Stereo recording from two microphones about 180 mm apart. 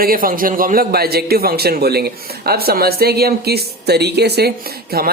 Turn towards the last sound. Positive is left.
turn(degrees=-60)  # may be behind; listen again after turning